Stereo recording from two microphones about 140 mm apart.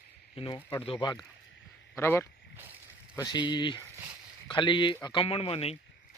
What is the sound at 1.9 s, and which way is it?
Speech, 20° left (ahead or behind).